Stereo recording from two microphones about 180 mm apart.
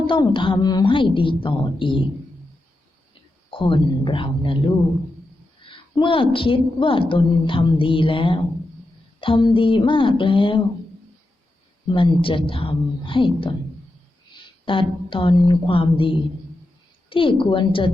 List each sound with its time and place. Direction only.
0.1 s a woman's voice: 30° left (ahead or behind)
3.5 s a woman's voice: 30° left (ahead or behind)
11.9 s a woman's voice: 25° left (ahead or behind)
14.6 s a woman's voice: 30° left (ahead or behind)